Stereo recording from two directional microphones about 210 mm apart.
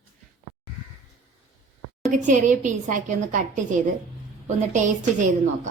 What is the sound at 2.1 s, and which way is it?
A woman's voice, 35° right (ahead or behind).